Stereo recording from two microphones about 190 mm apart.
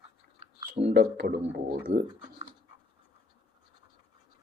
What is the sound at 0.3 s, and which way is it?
Clicking, 30° right (ahead or behind).